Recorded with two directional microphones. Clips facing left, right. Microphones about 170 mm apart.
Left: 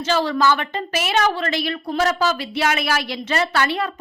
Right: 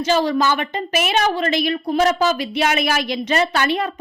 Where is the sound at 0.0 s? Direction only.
15° right (ahead or behind).